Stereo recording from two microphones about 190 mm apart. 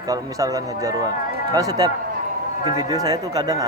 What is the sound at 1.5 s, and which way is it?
Speech, 20° right (ahead or behind).